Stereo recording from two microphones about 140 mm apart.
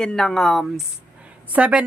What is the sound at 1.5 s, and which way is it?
Speech, 10° right (ahead or behind).